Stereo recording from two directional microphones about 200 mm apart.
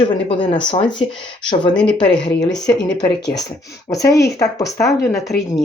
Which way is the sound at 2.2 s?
20° left (ahead or behind).